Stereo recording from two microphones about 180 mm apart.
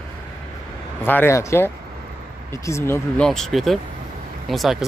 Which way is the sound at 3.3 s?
Centre (ahead or behind).